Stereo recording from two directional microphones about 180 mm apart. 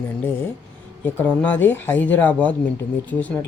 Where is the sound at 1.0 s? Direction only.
10° left (ahead or behind).